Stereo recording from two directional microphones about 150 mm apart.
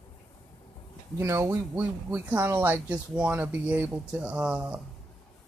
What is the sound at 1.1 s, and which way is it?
Speech, 20° right (ahead or behind).